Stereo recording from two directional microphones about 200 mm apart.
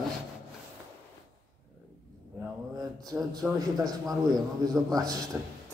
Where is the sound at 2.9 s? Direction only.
20° right (ahead or behind).